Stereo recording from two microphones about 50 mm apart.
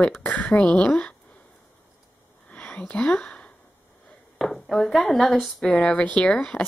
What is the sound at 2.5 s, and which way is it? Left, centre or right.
Whispering, left.